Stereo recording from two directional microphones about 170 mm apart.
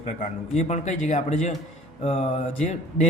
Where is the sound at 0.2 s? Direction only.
45° left (ahead or behind).